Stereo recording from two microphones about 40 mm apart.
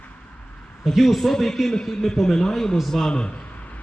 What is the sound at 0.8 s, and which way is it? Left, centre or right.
A man's voice, centre.